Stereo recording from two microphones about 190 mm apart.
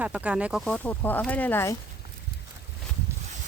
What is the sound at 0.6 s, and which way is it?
Speech, 5° left (ahead or behind).